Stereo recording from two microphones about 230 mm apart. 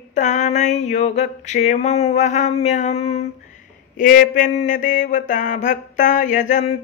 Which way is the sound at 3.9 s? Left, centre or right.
Left.